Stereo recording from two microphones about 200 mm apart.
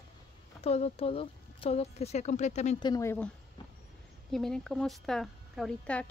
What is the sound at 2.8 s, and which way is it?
Speech, 15° left (ahead or behind).